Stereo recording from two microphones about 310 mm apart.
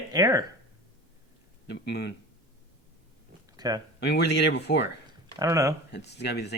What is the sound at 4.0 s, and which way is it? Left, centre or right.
Speech, left.